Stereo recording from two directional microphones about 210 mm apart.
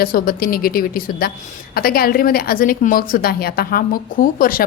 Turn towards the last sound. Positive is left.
turn(degrees=40)  # may be behind; listen again after turning